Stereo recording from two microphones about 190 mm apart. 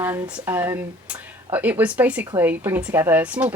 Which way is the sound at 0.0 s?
10° right (ahead or behind).